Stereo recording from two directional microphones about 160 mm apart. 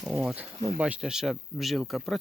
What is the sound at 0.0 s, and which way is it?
Speech, 5° right (ahead or behind).